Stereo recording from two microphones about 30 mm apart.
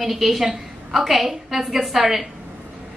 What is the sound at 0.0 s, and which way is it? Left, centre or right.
A woman's voice, centre.